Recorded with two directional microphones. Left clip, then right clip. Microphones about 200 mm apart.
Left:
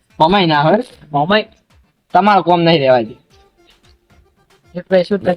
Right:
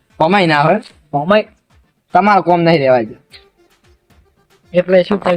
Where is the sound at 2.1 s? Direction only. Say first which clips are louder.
Even; centre (ahead or behind).